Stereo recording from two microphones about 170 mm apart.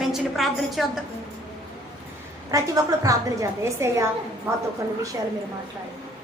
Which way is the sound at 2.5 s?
20° right (ahead or behind).